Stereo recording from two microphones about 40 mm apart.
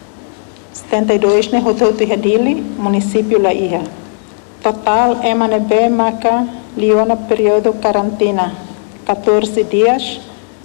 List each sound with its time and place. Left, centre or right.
0.8 s a woman's voice: centre